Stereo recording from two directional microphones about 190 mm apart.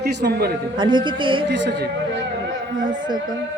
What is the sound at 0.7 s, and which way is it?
Speech, 25° right (ahead or behind).